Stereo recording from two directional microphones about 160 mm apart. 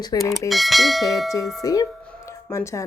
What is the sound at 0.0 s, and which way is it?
Speech, 25° left (ahead or behind).